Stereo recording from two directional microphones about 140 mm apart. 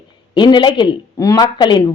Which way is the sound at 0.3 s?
35° left (ahead or behind).